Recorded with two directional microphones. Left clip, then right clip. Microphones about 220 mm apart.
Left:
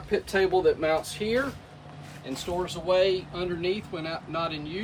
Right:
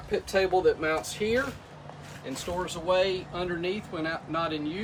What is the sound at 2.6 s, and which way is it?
Speech, 10° right (ahead or behind).